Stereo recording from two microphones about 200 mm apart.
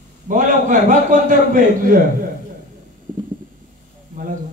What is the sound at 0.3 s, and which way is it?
A man's voice, 40° right (ahead or behind).